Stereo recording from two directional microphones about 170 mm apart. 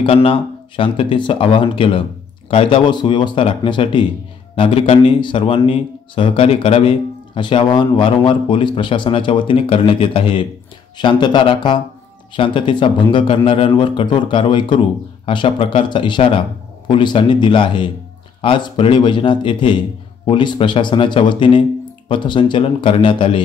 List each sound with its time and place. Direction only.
0.0 s speech: 30° left (ahead or behind)